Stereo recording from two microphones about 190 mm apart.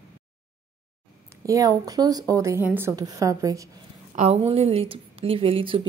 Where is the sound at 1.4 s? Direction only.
20° right (ahead or behind).